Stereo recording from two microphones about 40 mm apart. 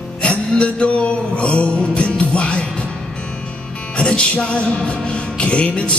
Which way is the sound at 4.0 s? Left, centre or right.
Left.